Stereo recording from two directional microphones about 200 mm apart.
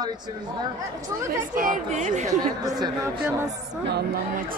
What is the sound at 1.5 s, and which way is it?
Speech, 40° right (ahead or behind).